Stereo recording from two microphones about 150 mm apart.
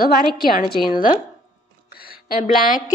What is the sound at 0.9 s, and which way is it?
Speech, 65° left (ahead or behind).